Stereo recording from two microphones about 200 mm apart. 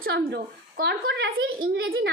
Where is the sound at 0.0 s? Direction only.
50° right (ahead or behind).